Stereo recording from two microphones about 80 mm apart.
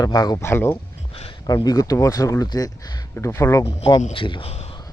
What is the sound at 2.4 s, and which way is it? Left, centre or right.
Speech, left.